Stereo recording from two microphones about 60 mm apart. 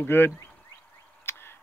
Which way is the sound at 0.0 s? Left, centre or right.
Left.